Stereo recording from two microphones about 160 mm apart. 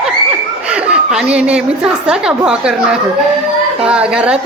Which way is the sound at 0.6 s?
5° right (ahead or behind).